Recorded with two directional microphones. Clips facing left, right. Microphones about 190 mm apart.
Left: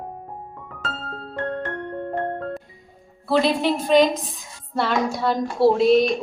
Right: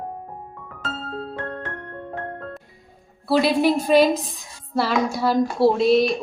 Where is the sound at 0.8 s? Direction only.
Centre (ahead or behind).